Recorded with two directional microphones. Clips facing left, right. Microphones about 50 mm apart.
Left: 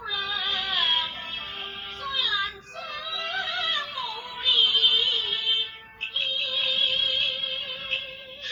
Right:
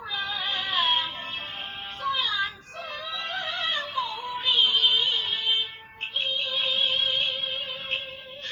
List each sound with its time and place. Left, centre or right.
0.1 s music: right
2.0 s child singing: right
6.1 s music: right